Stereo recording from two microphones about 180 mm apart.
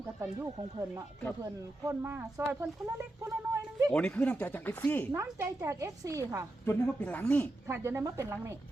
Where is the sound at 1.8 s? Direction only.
15° right (ahead or behind).